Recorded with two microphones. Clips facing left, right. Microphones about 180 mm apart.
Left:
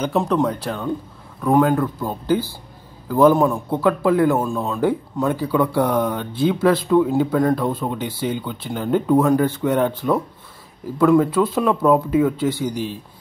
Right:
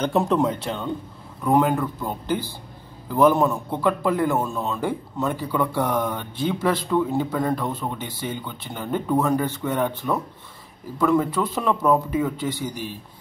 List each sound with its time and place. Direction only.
0.0 s speech: centre (ahead or behind)
2.0 s speech: 10° left (ahead or behind)
11.2 s speech: 10° left (ahead or behind)